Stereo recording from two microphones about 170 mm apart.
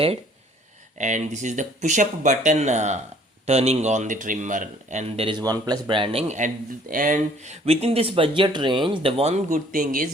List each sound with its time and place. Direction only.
0.9 s a man's voice: 45° right (ahead or behind)
9.7 s speech: 55° right (ahead or behind)